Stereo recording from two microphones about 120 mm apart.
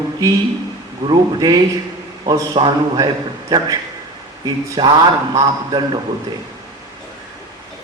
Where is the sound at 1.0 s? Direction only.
35° right (ahead or behind).